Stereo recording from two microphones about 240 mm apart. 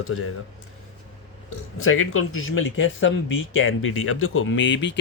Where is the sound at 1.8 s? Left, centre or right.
Left.